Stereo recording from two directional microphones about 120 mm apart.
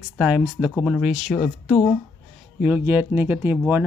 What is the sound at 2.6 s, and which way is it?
Speech, 15° right (ahead or behind).